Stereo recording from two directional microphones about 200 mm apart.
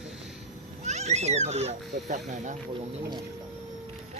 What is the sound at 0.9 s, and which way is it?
Speech, 35° right (ahead or behind).